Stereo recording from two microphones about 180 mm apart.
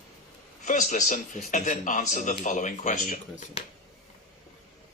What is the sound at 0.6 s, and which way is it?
Speech, 45° left (ahead or behind).